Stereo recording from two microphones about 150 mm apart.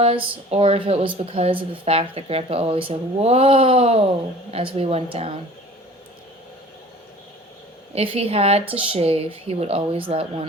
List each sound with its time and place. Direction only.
0.0 s speech: 40° right (ahead or behind)
7.9 s speech: 40° right (ahead or behind)